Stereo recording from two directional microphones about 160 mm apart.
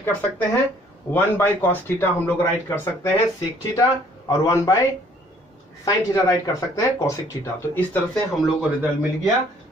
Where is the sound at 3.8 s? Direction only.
20° left (ahead or behind).